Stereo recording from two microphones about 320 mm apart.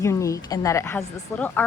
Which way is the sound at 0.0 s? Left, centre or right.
Centre.